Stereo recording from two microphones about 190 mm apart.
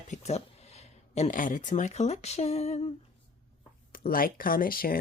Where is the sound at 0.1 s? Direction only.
35° left (ahead or behind).